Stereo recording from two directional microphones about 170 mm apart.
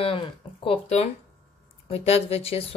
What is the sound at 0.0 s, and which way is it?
Speech, 30° left (ahead or behind).